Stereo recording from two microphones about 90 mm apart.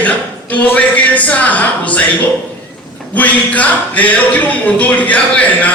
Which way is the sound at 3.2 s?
15° left (ahead or behind).